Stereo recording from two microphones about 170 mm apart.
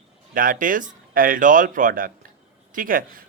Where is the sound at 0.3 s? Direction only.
50° right (ahead or behind).